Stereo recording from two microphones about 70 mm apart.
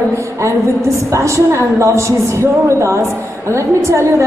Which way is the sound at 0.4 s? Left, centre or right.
Right.